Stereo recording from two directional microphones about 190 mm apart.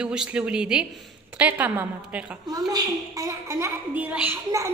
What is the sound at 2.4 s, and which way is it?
A woman's voice, 20° right (ahead or behind).